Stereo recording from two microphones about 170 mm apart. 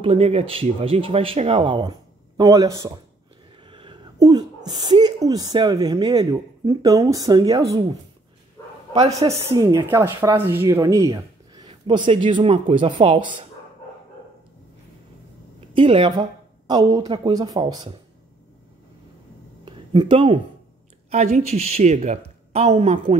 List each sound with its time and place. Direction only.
0.0 s speech: 35° right (ahead or behind)
9.1 s speech: 20° right (ahead or behind)
15.7 s a woman's voice: 30° right (ahead or behind)
19.6 s a sound: 30° right (ahead or behind)
21.1 s speech: 40° right (ahead or behind)